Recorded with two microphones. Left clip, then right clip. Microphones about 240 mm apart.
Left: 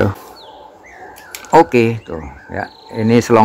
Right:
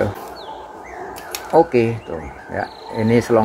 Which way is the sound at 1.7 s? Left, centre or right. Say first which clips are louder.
Left 3 dB; left.